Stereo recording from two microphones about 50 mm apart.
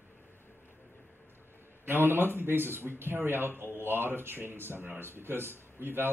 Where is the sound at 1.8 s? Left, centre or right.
Right.